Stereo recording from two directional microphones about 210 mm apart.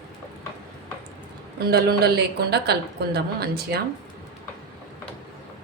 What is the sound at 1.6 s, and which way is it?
A woman's voice, 50° right (ahead or behind).